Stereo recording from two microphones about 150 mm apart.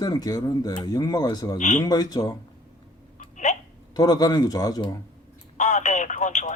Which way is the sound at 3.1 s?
55° left (ahead or behind).